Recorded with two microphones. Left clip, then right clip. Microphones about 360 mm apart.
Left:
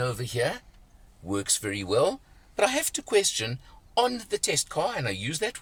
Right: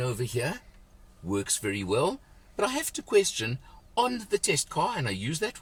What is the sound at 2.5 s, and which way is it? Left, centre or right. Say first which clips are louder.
Speech: left 4 dB; left.